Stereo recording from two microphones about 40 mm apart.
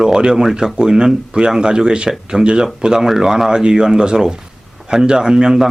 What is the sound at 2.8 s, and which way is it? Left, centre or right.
Speech, centre.